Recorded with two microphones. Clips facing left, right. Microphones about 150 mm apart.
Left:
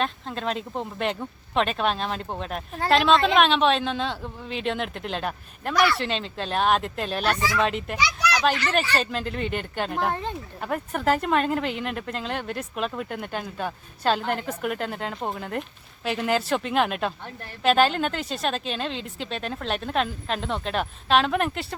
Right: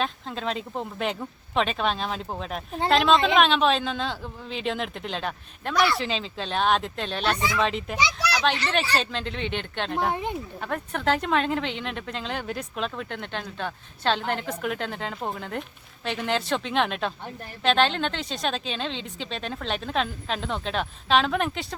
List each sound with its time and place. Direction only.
0.0 s speech: centre (ahead or behind)
7.9 s a child's voice: 25° right (ahead or behind)
9.0 s speech: 5° left (ahead or behind)
10.1 s speech: 15° right (ahead or behind)
10.6 s speech: 5° left (ahead or behind)